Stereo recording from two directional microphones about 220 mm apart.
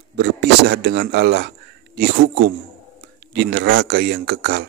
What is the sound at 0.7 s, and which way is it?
A man's voice, 50° right (ahead or behind).